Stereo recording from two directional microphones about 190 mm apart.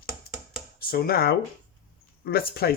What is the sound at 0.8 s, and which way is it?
Speech, 50° left (ahead or behind).